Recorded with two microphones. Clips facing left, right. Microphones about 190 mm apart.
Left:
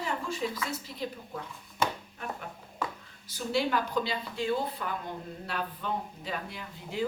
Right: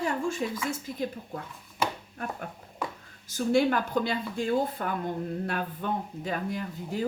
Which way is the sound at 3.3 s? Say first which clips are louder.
Right 6 dB; 50° right (ahead or behind).